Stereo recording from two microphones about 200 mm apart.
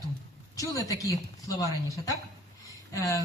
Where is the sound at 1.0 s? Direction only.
15° left (ahead or behind).